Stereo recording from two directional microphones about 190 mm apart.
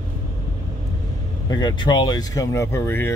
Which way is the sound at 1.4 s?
20° left (ahead or behind).